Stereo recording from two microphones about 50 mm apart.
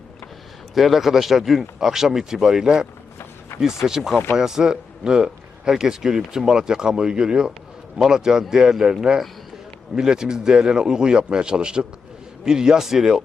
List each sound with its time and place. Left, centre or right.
0.7 s a man's voice: centre